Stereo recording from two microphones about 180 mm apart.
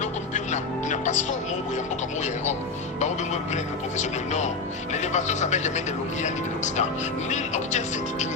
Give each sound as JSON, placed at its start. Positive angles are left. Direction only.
{"t": 0.0, "sound": "music", "side_deg": 40}
{"t": 2.2, "sound": "speech", "side_deg": 40}